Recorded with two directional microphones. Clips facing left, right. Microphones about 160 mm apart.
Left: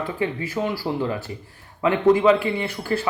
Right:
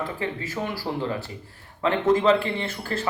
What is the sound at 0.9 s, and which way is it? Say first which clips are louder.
Speech: left 3 dB; 15° left (ahead or behind).